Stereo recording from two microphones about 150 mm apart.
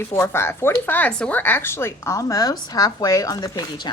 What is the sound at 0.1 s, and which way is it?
Speech, 15° left (ahead or behind).